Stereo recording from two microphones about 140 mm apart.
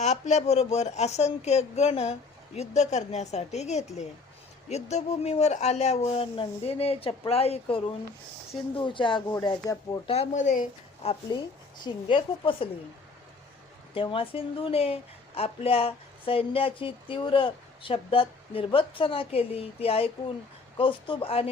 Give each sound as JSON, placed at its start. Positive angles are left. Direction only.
{"t": 0.0, "sound": "speech", "side_deg": 55}
{"t": 10.1, "sound": "a woman's voice", "side_deg": 50}
{"t": 11.0, "sound": "speech", "side_deg": 45}
{"t": 13.9, "sound": "speech", "side_deg": 40}